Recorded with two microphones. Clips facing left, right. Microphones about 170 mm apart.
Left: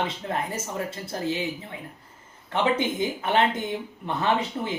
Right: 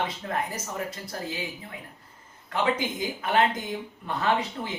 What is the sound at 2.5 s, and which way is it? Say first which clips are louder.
Speech: left 3 dB; 25° left (ahead or behind).